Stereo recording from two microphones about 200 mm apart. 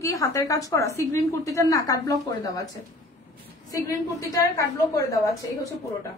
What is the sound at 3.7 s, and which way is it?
A woman's voice, 15° left (ahead or behind).